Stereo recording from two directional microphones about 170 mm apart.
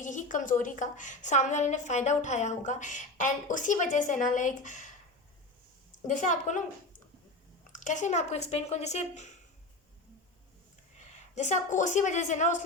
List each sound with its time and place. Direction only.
0.0 s a woman's voice: 50° left (ahead or behind)
6.1 s a woman's voice: 45° left (ahead or behind)
7.7 s speech: 45° left (ahead or behind)
11.3 s a woman's voice: 45° left (ahead or behind)